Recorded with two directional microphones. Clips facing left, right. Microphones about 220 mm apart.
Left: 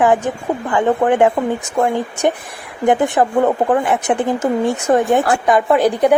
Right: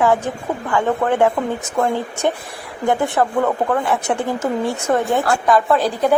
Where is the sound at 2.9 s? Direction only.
20° left (ahead or behind).